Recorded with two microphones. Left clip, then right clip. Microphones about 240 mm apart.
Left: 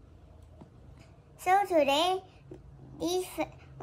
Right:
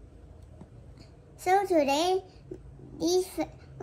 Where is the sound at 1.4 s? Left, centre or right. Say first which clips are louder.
Right 1 dB; left.